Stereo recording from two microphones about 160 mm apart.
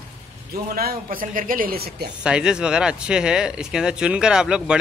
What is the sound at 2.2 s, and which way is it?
A man's voice, 5° right (ahead or behind).